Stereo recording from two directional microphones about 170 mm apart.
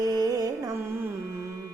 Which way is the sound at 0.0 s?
20° right (ahead or behind).